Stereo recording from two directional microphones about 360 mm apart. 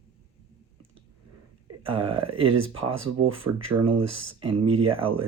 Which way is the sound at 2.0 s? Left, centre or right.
Right.